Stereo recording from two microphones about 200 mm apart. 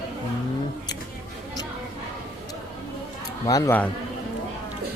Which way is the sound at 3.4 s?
15° left (ahead or behind).